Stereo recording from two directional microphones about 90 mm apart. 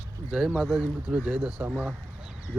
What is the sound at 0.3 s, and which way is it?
Speech, 10° right (ahead or behind).